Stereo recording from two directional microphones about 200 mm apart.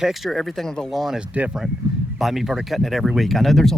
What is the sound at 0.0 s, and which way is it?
Speech, centre (ahead or behind).